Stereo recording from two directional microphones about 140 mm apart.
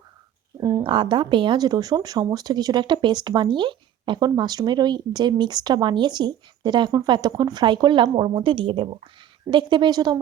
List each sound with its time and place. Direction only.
0.6 s speech: 30° right (ahead or behind)